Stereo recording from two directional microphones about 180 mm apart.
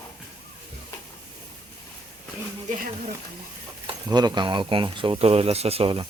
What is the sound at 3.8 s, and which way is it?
Speech, 25° right (ahead or behind).